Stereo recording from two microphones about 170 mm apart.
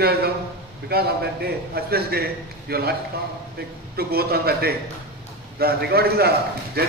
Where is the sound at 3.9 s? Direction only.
65° right (ahead or behind).